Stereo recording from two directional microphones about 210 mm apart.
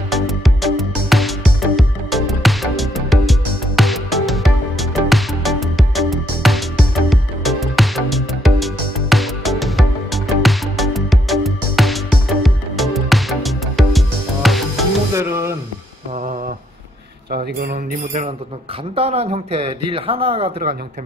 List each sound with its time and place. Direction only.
0.1 s music: centre (ahead or behind)
15.1 s music: 15° right (ahead or behind)
17.3 s a man's voice: 45° right (ahead or behind); by 20.6 s 25° right (ahead or behind)